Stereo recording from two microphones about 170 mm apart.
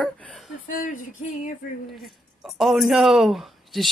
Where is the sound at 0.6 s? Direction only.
50° left (ahead or behind).